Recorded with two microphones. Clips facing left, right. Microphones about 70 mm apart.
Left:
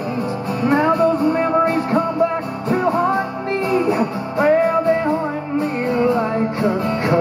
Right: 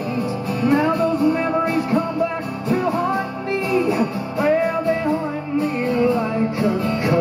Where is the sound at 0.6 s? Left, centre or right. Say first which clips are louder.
Left 2 dB; left.